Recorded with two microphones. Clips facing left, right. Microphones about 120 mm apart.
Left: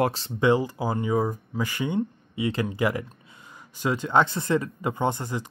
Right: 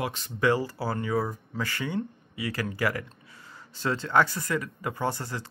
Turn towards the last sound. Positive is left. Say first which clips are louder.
# left 4 dB
turn(degrees=15)  # may be behind; listen again after turning